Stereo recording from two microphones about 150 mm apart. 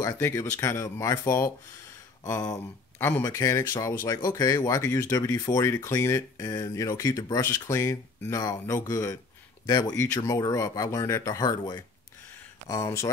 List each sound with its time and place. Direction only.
0.0 s speech: 20° left (ahead or behind)